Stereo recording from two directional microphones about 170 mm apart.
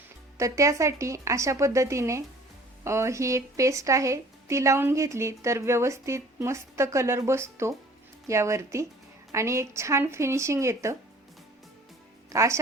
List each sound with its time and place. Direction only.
0.3 s a woman's voice: 20° right (ahead or behind)
12.3 s speech: 15° right (ahead or behind)